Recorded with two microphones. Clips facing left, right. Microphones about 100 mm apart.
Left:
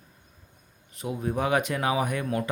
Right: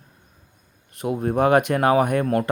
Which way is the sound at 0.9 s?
60° right (ahead or behind).